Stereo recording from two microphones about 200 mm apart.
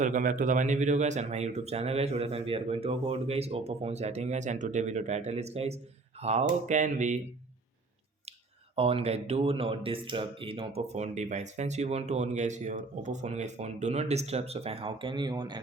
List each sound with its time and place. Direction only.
0.0 s speech: 40° right (ahead or behind)
8.7 s speech: 30° right (ahead or behind)